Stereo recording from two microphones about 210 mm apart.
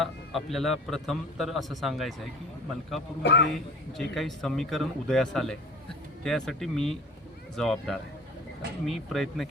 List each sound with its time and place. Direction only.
0.0 s a man's voice: centre (ahead or behind)
3.2 s speech: 55° left (ahead or behind)
3.9 s a man's voice: centre (ahead or behind)